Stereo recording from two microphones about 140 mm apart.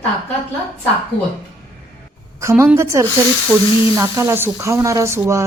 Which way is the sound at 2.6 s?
20° right (ahead or behind).